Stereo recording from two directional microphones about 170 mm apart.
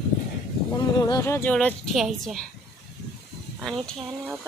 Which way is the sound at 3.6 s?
Centre (ahead or behind).